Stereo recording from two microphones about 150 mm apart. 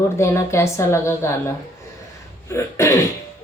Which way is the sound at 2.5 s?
20° left (ahead or behind).